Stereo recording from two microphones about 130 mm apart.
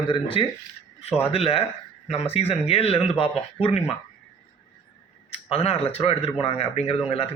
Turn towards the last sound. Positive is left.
turn(degrees=50)  # may be behind; listen again after turning